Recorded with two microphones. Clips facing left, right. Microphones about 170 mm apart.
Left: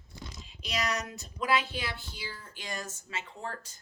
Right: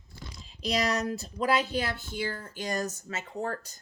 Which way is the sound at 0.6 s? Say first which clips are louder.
Right 6 dB; 35° right (ahead or behind).